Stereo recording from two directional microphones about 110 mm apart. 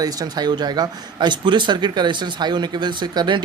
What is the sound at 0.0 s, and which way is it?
Speech, 35° right (ahead or behind).